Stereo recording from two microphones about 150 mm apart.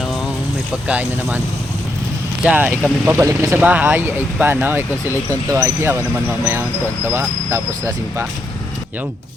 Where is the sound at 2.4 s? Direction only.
10° right (ahead or behind).